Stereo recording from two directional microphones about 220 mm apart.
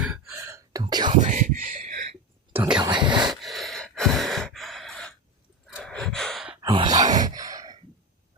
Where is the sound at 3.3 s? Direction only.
Centre (ahead or behind).